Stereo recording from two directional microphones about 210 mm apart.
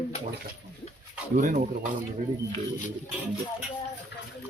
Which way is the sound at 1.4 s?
40° right (ahead or behind).